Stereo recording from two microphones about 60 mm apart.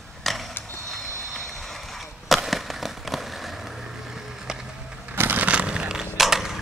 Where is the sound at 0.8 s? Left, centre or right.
Centre.